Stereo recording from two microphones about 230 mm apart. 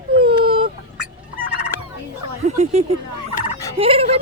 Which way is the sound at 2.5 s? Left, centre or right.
Right.